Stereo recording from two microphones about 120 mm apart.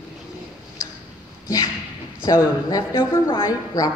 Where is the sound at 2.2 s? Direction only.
30° left (ahead or behind).